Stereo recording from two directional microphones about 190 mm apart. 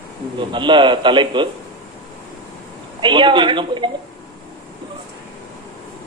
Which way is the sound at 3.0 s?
25° right (ahead or behind).